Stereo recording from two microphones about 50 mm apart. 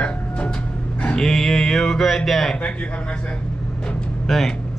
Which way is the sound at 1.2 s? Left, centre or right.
Centre.